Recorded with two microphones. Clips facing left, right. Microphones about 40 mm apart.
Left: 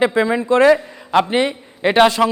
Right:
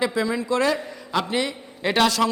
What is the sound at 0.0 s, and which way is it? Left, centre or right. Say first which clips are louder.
A man's voice: left 7 dB; left.